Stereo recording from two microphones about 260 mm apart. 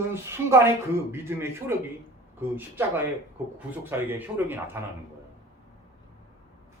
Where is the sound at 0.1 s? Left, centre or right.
Centre.